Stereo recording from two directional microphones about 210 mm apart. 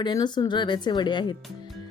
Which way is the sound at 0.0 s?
20° left (ahead or behind).